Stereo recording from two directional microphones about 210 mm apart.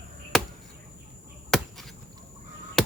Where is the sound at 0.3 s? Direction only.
Centre (ahead or behind).